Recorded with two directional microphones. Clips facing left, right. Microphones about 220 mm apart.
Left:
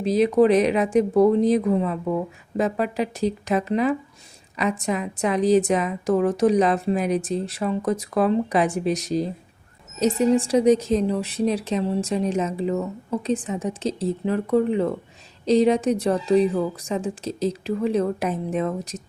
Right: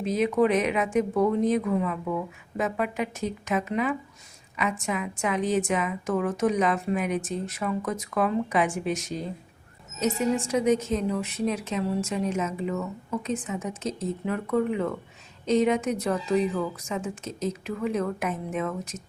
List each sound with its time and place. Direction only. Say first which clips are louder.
0.0 s a woman's voice: left 5 dB; 35° left (ahead or behind)